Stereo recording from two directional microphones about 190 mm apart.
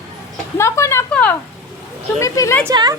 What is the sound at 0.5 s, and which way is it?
A woman's voice, 15° left (ahead or behind).